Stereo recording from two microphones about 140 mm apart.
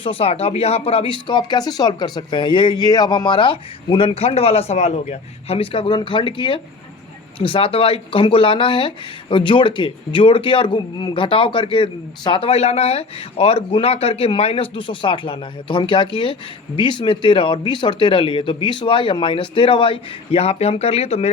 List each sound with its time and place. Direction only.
0.0 s speech: 40° left (ahead or behind)